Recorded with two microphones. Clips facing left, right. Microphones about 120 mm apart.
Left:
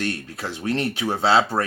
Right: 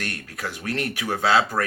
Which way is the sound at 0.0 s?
25° left (ahead or behind).